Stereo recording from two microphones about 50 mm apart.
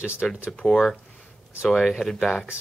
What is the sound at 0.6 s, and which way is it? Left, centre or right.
Speech, centre.